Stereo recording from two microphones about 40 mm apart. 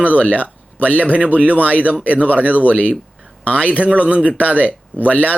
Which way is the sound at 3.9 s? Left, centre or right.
Right.